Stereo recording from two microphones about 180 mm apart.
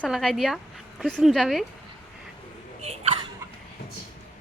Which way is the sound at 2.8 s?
35° right (ahead or behind).